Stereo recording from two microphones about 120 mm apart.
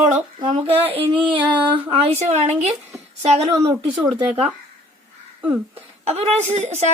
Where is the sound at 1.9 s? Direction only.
60° right (ahead or behind).